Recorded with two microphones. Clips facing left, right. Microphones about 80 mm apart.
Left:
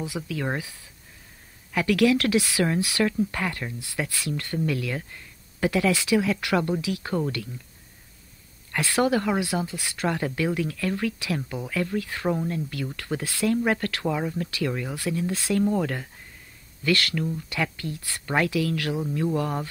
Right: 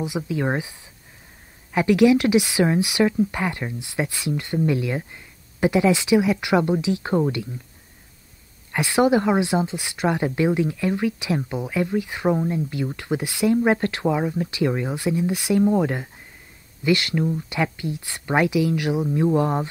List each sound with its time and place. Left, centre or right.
0.0 s speech: right
8.7 s speech: centre